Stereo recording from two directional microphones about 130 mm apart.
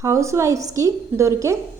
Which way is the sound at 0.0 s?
25° right (ahead or behind).